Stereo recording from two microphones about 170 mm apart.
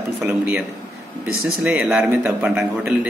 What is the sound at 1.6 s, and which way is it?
A man's voice, 5° right (ahead or behind).